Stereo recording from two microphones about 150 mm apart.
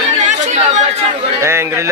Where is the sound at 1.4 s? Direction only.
15° right (ahead or behind).